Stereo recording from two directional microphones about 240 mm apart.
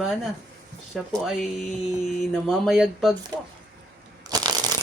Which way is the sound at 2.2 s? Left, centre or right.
Centre.